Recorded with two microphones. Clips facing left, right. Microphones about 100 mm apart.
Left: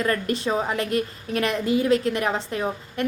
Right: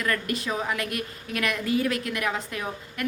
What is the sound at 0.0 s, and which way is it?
A woman's voice, 30° left (ahead or behind).